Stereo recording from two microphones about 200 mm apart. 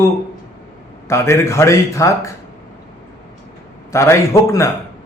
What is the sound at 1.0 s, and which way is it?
Speech, 15° left (ahead or behind).